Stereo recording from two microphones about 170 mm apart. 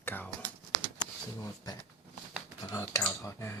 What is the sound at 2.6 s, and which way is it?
Speech, 20° left (ahead or behind).